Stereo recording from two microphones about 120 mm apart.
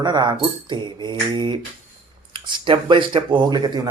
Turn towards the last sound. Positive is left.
turn(degrees=-35)  # may be behind; listen again after turning